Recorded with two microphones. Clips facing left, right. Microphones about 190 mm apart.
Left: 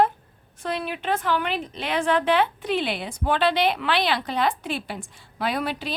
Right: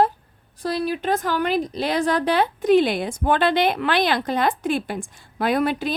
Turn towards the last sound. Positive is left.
turn(degrees=-50)  # may be behind; listen again after turning